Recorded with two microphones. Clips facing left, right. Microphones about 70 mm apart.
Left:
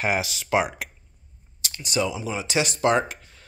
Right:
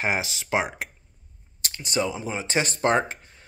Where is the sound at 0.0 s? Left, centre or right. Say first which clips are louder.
Left 1 dB; right.